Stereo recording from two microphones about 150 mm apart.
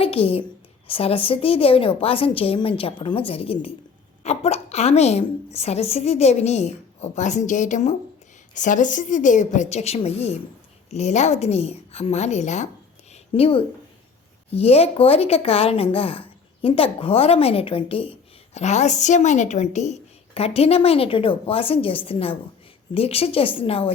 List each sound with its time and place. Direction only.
0.0 s a woman's voice: 40° left (ahead or behind)
13.3 s a woman's voice: 40° left (ahead or behind)